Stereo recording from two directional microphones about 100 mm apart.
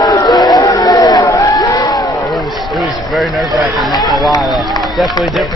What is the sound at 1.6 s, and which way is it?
Crowd, 40° left (ahead or behind).